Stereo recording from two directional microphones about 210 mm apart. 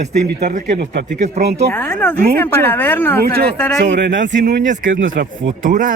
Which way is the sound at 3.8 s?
55° right (ahead or behind).